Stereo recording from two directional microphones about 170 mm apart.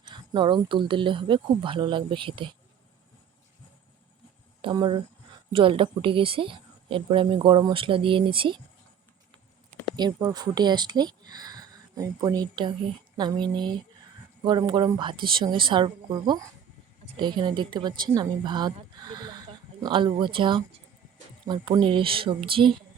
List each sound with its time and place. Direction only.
0.1 s speech: 25° right (ahead or behind)
4.6 s speech: 25° right (ahead or behind)
9.9 s speech: 25° right (ahead or behind)